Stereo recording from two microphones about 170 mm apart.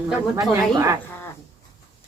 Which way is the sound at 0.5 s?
15° right (ahead or behind).